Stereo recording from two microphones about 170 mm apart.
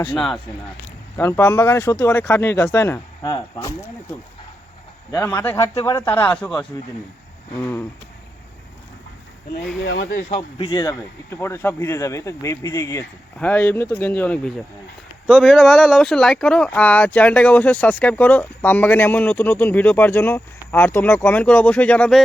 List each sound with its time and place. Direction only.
0.1 s speech: centre (ahead or behind)
1.1 s speech: 15° left (ahead or behind)
5.1 s speech: 15° left (ahead or behind)
10.1 s speech: 55° left (ahead or behind)
10.6 s speech: 25° left (ahead or behind); by 22.2 s 5° left (ahead or behind)